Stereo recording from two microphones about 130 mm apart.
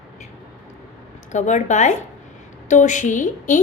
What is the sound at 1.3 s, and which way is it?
A woman's voice, 65° left (ahead or behind).